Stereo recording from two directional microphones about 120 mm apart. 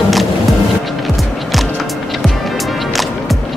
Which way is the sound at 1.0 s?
Centre (ahead or behind).